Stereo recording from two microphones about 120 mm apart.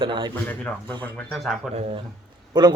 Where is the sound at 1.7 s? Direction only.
60° right (ahead or behind).